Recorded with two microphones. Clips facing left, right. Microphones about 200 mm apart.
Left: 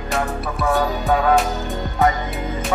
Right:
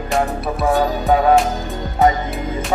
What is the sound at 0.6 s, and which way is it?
Music, 25° right (ahead or behind).